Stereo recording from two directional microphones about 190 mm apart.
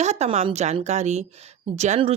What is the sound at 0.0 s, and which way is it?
Speech, 35° right (ahead or behind).